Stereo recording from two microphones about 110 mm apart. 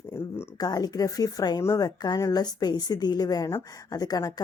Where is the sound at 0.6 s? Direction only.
35° left (ahead or behind).